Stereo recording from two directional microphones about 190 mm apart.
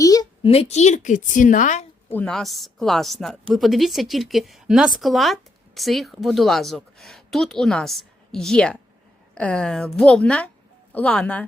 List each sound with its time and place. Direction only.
0.0 s a sound: 20° left (ahead or behind)
0.5 s a woman's voice: 35° left (ahead or behind)
2.0 s a woman's voice: 5° left (ahead or behind)